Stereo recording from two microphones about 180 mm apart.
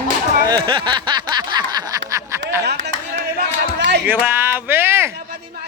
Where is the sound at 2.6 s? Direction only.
70° right (ahead or behind).